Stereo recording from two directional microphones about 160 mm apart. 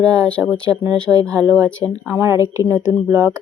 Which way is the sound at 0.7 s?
25° right (ahead or behind).